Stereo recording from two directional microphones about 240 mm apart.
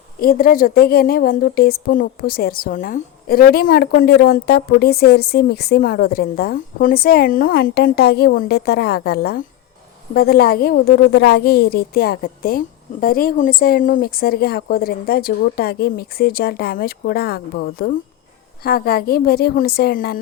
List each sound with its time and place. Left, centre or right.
0.2 s a woman's voice: left